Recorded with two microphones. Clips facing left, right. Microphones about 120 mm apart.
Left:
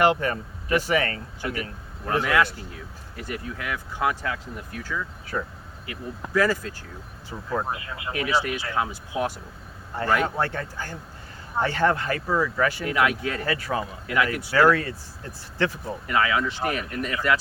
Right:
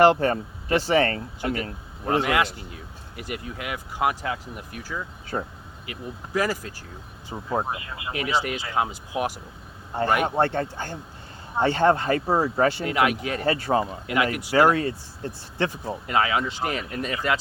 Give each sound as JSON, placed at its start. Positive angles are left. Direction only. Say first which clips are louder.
{"t": 0.0, "sound": "speech", "louder": "right 4 dB", "side_deg": -30}
{"t": 4.9, "sound": "speech", "louder": "even", "side_deg": -25}
{"t": 7.3, "sound": "speech", "louder": "right 2 dB", "side_deg": -25}
{"t": 7.7, "sound": "speech", "louder": "even", "side_deg": -5}
{"t": 8.1, "sound": "speech", "louder": "left 1 dB", "side_deg": -20}